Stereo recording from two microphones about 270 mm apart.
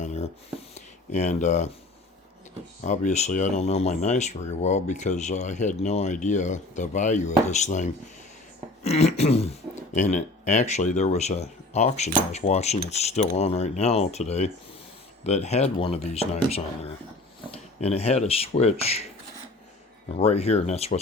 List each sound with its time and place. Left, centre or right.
0.0 s a sound: left
2.8 s speech: left
20.1 s speech: left